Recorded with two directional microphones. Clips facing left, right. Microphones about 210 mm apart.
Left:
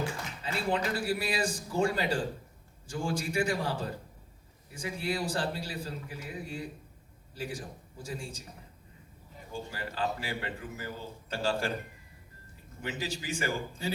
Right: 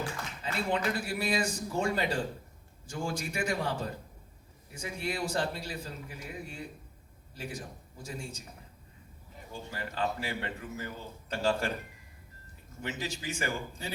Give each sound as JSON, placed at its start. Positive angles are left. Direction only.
{"t": 0.4, "sound": "a man's voice", "side_deg": 35}
{"t": 9.7, "sound": "a man's voice", "side_deg": 35}
{"t": 12.8, "sound": "a man's voice", "side_deg": 35}